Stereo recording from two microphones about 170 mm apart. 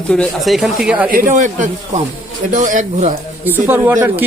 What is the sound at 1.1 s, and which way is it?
A man's voice, 50° right (ahead or behind).